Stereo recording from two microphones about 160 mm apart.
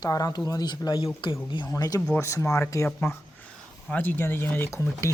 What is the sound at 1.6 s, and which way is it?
Speech, 20° left (ahead or behind).